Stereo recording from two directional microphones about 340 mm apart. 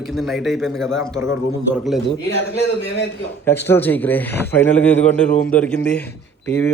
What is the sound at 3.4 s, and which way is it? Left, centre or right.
Speech, centre.